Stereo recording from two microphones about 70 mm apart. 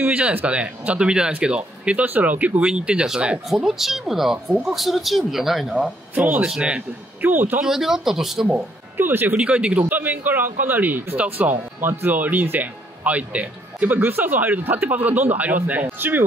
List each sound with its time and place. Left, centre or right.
0.0 s a man's voice: right; by 5.8 s centre
6.1 s a man's voice: right
7.6 s speech: centre
8.5 s speech: right
9.4 s a man's voice: centre